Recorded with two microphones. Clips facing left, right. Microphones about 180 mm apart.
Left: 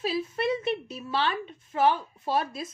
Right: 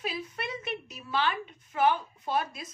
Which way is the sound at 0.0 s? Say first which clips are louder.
Left 8 dB; 25° left (ahead or behind).